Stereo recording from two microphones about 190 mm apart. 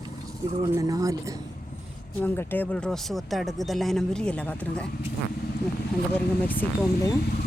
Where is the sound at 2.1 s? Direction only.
10° left (ahead or behind).